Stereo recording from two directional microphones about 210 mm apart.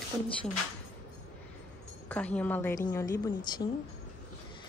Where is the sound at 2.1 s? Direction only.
5° left (ahead or behind).